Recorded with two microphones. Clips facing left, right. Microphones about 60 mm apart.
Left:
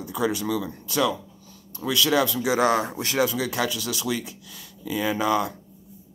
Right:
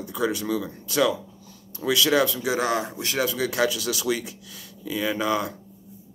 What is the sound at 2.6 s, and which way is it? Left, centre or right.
Speech, left.